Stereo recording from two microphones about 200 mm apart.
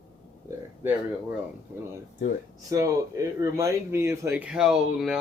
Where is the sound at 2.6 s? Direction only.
15° right (ahead or behind).